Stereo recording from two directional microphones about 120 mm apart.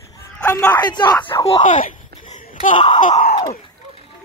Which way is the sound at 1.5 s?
80° left.